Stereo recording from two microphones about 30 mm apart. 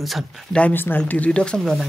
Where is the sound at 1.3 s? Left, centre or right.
Left.